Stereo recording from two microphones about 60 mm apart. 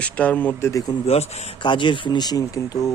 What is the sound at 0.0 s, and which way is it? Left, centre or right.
Speech, left.